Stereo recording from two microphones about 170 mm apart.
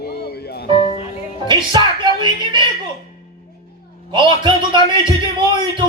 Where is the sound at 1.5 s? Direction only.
25° right (ahead or behind).